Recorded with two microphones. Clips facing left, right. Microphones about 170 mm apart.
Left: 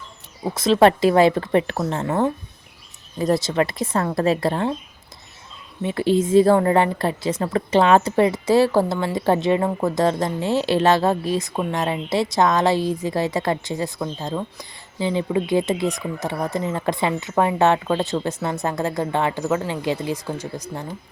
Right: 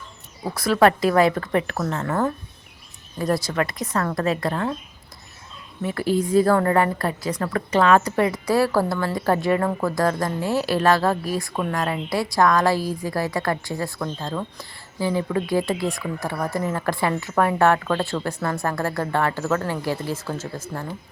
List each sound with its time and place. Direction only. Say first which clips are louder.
0.4 s a woman's voice: left 2 dB; 25° left (ahead or behind)
5.8 s a woman's voice: left 3 dB; 25° left (ahead or behind)